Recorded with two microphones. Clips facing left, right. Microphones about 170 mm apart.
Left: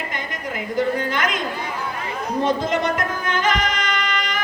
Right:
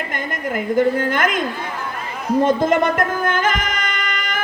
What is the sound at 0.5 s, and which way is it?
Speech, 50° right (ahead or behind).